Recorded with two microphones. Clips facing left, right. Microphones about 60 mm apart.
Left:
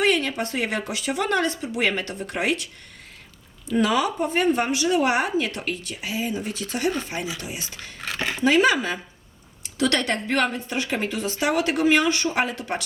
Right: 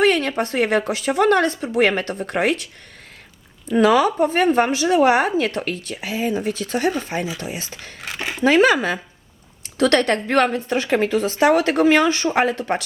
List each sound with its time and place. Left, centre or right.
0.0 s a sound: right
0.5 s speech: right
3.7 s a woman's voice: right
8.0 s a sound: centre
8.4 s a woman's voice: right
12.3 s speech: right